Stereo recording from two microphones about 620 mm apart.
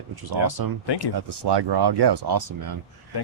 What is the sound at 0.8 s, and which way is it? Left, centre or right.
Speech, left.